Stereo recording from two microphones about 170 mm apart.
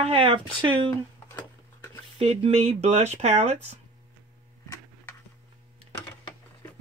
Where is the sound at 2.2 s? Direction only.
35° right (ahead or behind).